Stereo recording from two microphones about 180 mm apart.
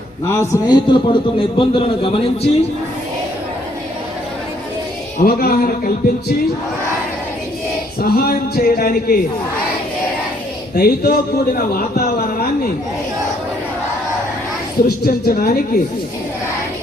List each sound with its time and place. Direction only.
0.3 s a man's voice: 15° left (ahead or behind); by 2.5 s 30° left (ahead or behind)
5.1 s speech: 55° left (ahead or behind)
8.0 s speech: 55° left (ahead or behind)
10.8 s a man's voice: 55° left (ahead or behind)
14.8 s speech: 55° left (ahead or behind)